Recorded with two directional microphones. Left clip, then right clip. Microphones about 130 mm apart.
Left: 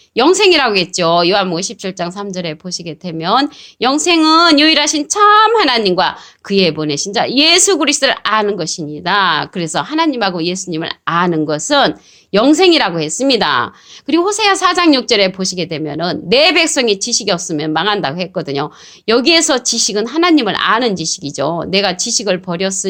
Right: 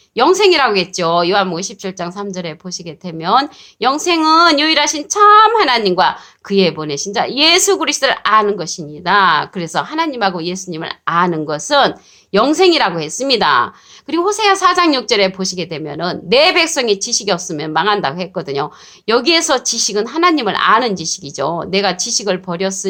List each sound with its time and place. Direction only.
0.2 s a woman's voice: 35° left (ahead or behind)